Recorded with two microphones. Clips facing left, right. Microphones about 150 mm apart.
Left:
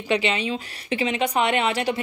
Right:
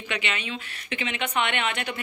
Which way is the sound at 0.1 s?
30° left (ahead or behind).